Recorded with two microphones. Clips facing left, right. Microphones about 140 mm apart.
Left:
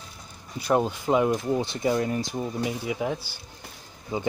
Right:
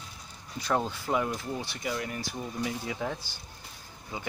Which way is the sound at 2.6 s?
15° left (ahead or behind).